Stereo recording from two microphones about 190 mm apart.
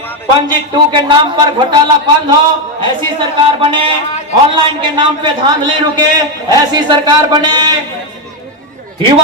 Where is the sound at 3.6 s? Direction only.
25° right (ahead or behind).